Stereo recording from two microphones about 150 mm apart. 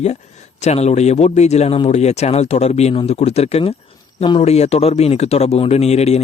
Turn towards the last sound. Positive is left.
turn(degrees=45)  # may be behind; listen again after turning